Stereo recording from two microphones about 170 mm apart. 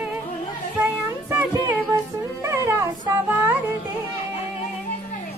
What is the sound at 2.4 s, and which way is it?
Music, 15° right (ahead or behind).